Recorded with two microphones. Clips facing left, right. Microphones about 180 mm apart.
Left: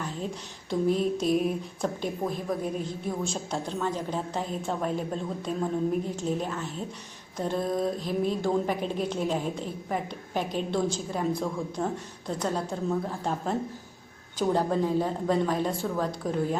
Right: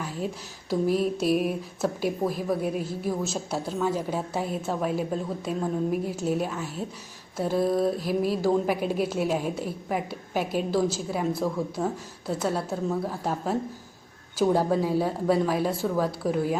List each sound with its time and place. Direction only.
0.7 s a woman's voice: 5° right (ahead or behind)